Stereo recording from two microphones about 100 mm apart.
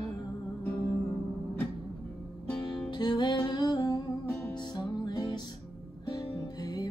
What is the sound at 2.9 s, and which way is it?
Music, 50° left (ahead or behind).